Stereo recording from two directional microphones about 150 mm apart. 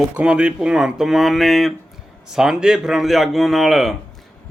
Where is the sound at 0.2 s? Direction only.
5° right (ahead or behind).